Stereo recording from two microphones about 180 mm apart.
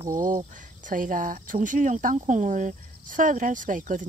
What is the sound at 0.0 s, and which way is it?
Speech, 45° right (ahead or behind).